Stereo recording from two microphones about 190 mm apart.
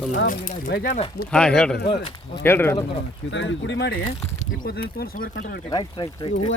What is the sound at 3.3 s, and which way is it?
Speech, 70° left (ahead or behind).